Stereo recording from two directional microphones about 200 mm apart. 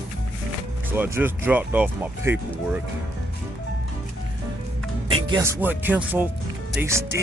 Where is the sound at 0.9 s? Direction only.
10° right (ahead or behind).